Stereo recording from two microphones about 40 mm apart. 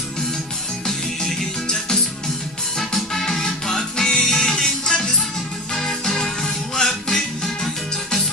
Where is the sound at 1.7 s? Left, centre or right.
Centre.